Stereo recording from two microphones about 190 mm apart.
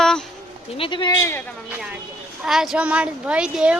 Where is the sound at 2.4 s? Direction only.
Centre (ahead or behind).